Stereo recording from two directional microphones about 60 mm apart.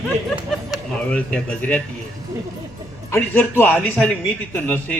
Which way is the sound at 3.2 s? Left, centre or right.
Left.